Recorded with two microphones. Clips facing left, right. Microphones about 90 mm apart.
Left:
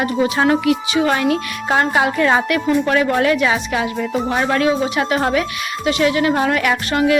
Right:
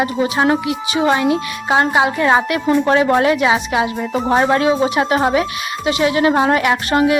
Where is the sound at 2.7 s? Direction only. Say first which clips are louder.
Right 4 dB; 25° right (ahead or behind).